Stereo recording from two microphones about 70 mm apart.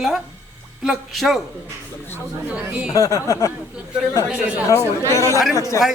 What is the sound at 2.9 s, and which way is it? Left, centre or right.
Speech, left.